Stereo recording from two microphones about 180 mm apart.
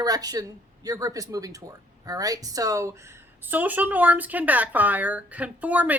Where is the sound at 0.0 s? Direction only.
20° right (ahead or behind).